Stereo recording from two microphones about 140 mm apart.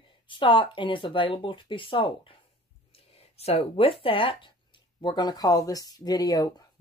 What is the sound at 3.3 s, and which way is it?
Speech, 45° left (ahead or behind).